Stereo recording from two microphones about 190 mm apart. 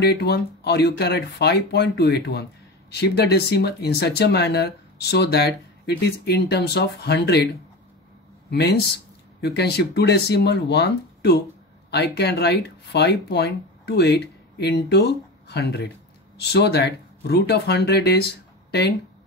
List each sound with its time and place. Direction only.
0.0 s speech: 60° left (ahead or behind)
8.5 s speech: 60° left (ahead or behind)